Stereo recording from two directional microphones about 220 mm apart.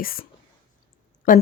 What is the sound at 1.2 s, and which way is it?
Speech, 40° left (ahead or behind).